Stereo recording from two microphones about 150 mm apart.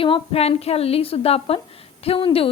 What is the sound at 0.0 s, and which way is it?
A woman's voice, 40° left (ahead or behind).